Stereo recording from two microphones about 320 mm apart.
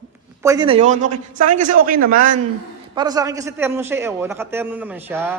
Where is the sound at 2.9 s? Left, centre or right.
Centre.